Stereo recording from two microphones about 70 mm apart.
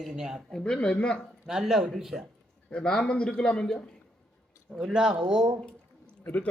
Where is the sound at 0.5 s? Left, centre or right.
Centre.